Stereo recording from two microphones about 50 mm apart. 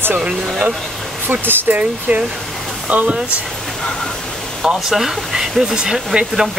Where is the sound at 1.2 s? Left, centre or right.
Right.